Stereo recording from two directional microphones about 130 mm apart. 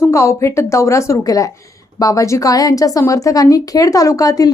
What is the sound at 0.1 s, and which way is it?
Speech, 20° left (ahead or behind).